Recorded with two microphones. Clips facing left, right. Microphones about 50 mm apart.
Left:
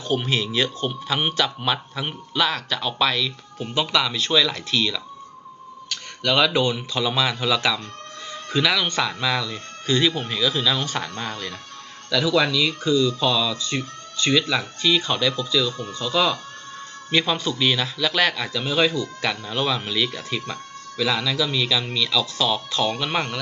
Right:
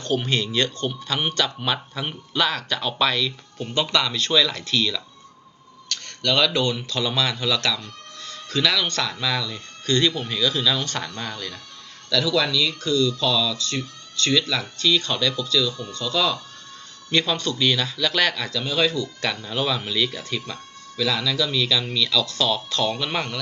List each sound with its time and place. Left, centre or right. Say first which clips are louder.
0.0 s speech: even; centre
11.2 s speech: left 2 dB; left; by 20.1 s centre
20.4 s music: left 3 dB; left
21.2 s speech: even; centre